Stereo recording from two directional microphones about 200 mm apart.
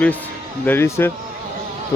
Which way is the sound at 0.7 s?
10° left (ahead or behind).